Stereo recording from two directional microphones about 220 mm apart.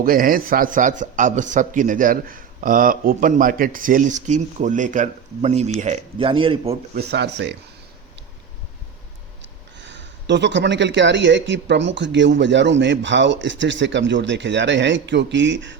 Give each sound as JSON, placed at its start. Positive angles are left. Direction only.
{"t": 0.0, "sound": "a man's voice", "side_deg": -40}
{"t": 6.9, "sound": "speech", "side_deg": -50}
{"t": 9.7, "sound": "speech", "side_deg": -55}